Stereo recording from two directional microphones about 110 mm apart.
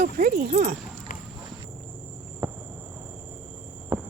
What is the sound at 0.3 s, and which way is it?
Speech, 90° right.